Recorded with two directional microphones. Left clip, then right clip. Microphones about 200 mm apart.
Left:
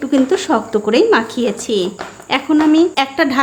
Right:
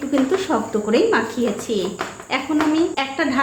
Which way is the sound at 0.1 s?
45° left (ahead or behind).